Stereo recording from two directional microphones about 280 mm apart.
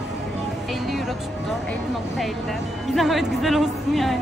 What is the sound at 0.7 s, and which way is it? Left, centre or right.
Speech, centre.